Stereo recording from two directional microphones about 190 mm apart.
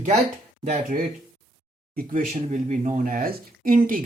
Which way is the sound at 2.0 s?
40° right (ahead or behind).